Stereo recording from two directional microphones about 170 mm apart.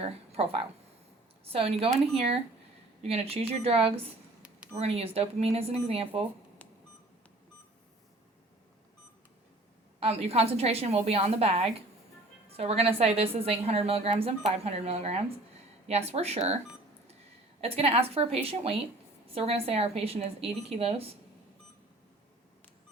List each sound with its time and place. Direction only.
0.0 s speech: 35° right (ahead or behind)
10.0 s speech: 35° right (ahead or behind)
17.6 s speech: 35° right (ahead or behind)